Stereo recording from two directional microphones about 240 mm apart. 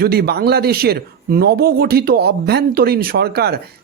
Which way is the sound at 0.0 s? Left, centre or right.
Right.